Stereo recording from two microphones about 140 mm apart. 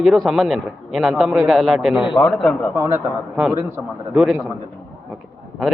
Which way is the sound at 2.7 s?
20° right (ahead or behind).